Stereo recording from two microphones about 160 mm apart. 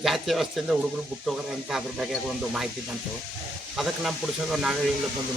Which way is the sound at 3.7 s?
Centre (ahead or behind).